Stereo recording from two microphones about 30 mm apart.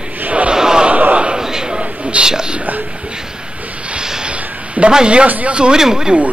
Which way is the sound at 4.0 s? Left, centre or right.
Right.